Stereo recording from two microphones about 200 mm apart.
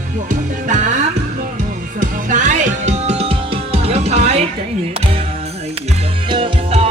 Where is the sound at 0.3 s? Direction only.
40° right (ahead or behind).